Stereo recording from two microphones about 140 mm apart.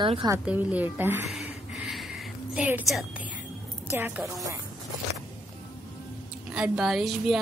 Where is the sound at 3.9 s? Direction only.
15° right (ahead or behind).